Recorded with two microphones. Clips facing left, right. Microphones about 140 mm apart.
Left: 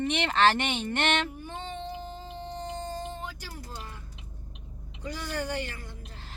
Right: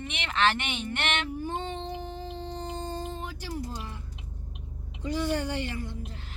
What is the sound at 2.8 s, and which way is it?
Music, 30° right (ahead or behind).